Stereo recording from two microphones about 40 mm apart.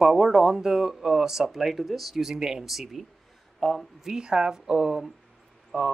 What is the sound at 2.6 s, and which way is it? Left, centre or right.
Speech, centre.